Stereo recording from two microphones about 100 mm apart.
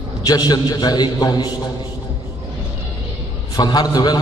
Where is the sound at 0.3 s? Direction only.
45° left (ahead or behind).